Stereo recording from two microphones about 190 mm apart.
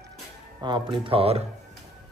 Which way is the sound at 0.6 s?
25° right (ahead or behind).